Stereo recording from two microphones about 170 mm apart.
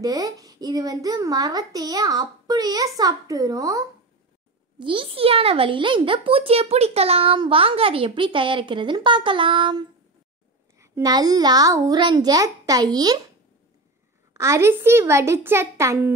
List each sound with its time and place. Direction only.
0.0 s speech: 20° right (ahead or behind)
4.7 s a child's voice: 30° right (ahead or behind)
14.3 s a child's voice: 15° right (ahead or behind)